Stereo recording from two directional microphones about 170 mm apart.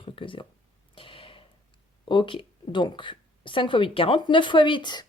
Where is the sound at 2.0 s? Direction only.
30° left (ahead or behind).